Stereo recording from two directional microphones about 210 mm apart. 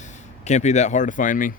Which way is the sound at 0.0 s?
35° left (ahead or behind).